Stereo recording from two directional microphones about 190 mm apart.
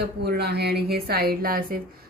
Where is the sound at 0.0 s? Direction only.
60° right (ahead or behind).